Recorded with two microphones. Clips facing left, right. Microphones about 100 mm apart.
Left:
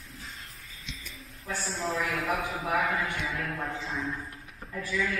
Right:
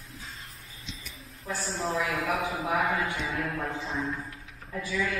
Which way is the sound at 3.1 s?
Centre (ahead or behind).